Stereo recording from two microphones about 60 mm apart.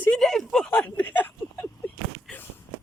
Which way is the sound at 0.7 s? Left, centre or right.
Left.